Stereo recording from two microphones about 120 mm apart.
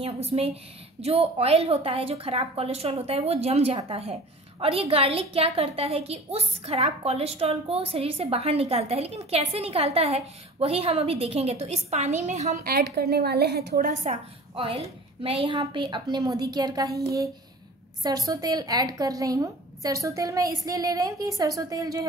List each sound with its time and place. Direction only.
0.0 s a woman's voice: 55° right (ahead or behind); by 12.5 s 70° right (ahead or behind)
13.8 s a woman's voice: 75° right (ahead or behind)
14.5 s a woman's voice: 50° right (ahead or behind); by 22.0 s 30° right (ahead or behind)